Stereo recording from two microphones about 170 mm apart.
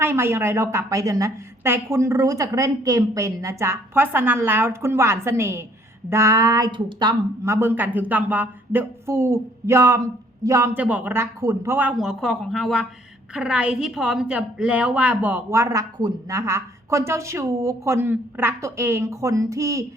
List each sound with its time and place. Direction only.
0.0 s a woman's voice: 15° right (ahead or behind)